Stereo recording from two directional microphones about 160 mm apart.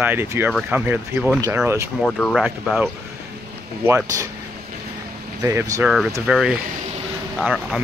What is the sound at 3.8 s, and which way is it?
Speech, 15° right (ahead or behind).